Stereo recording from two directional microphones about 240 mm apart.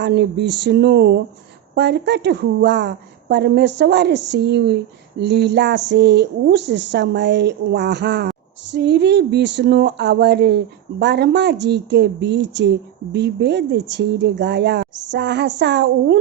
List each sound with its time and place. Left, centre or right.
0.0 s speech: right